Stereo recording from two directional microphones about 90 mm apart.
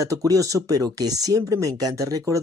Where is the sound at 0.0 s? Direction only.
40° right (ahead or behind).